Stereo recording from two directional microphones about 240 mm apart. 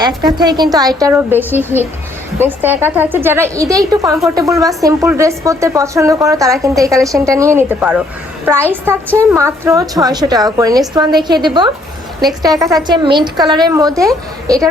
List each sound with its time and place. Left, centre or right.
0.3 s a woman's voice: centre